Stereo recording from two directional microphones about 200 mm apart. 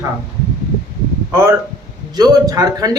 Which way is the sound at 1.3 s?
15° right (ahead or behind).